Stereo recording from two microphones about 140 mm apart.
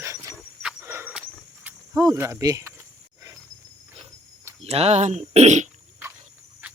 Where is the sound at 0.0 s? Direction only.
20° right (ahead or behind).